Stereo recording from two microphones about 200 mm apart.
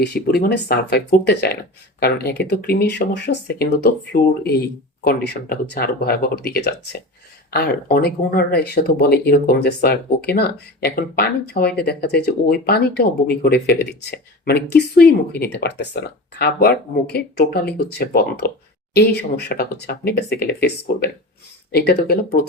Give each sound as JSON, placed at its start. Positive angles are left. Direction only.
{"t": 0.0, "sound": "speech", "side_deg": 55}